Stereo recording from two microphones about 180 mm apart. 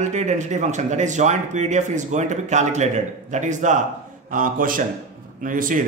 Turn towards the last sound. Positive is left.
turn(degrees=-50)  # may be behind; listen again after turning